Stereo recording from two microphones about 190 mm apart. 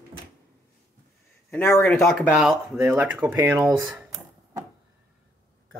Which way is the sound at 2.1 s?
5° right (ahead or behind).